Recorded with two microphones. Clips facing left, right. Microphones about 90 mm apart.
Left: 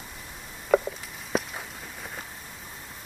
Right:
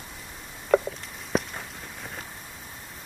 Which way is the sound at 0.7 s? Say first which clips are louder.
Even; 5° left (ahead or behind).